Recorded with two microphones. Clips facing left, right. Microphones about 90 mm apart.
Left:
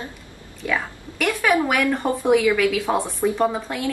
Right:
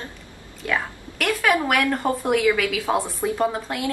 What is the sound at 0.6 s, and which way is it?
A woman's voice, 5° left (ahead or behind).